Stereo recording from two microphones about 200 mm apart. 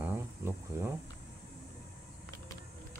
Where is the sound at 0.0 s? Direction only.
10° right (ahead or behind).